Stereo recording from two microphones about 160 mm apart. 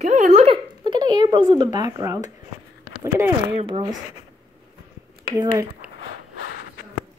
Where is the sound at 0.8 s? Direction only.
30° right (ahead or behind).